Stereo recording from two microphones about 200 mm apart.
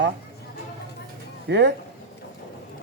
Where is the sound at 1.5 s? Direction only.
60° right (ahead or behind).